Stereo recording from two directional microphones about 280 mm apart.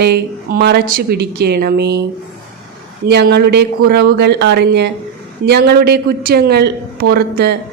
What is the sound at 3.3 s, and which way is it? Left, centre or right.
A woman's voice, right.